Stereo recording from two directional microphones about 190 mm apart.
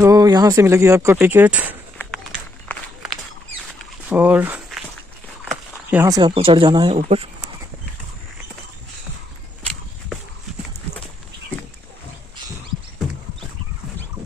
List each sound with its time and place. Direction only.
0.0 s speech: 20° right (ahead or behind)
4.1 s speech: 10° right (ahead or behind)
5.4 s walk: 5° right (ahead or behind)
6.0 s speech: 20° right (ahead or behind)